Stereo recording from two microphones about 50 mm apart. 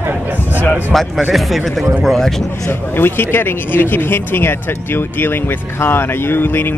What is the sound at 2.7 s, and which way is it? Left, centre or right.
Speech, left.